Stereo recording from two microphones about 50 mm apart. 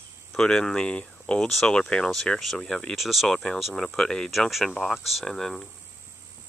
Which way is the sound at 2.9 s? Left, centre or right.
Centre.